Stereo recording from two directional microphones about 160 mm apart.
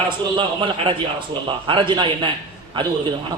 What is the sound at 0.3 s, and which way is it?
A man's voice, 30° right (ahead or behind).